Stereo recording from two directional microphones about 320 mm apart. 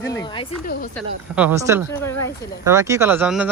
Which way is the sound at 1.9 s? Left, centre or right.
Centre.